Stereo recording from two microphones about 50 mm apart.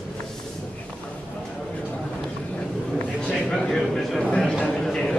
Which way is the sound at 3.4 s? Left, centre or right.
Centre.